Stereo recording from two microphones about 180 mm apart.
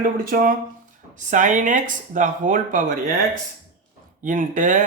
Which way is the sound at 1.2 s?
45° right (ahead or behind).